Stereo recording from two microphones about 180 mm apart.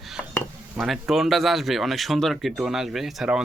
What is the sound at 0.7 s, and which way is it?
Speech, centre (ahead or behind).